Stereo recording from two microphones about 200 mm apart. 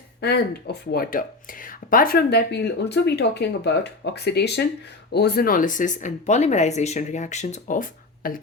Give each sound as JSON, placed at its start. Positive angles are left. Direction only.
{"t": 0.2, "sound": "speech", "side_deg": 55}